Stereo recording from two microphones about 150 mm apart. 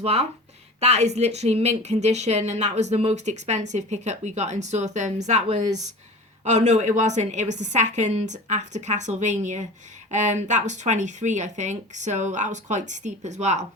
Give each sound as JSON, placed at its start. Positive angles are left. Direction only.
{"t": 0.0, "sound": "a woman's voice", "side_deg": -45}